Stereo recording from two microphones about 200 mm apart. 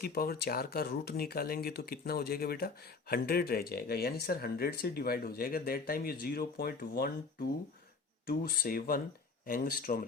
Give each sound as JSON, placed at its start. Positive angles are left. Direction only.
{"t": 0.0, "sound": "speech", "side_deg": 50}
{"t": 8.3, "sound": "speech", "side_deg": 45}